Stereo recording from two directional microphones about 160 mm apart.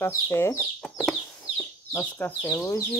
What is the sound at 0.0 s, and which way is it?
Speech, 15° left (ahead or behind).